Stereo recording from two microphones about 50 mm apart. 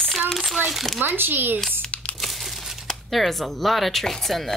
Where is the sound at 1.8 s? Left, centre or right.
Left.